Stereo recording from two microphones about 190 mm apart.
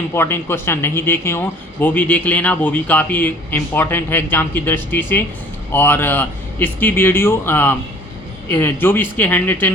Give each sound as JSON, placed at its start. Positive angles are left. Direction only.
{"t": 0.1, "sound": "speech", "side_deg": 10}